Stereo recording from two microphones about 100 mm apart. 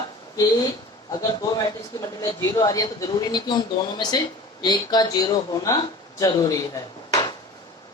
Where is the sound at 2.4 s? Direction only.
35° left (ahead or behind).